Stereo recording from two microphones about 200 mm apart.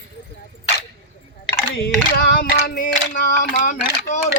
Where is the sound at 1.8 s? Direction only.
50° left (ahead or behind).